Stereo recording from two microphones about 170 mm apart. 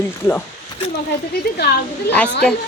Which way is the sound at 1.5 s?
70° left (ahead or behind).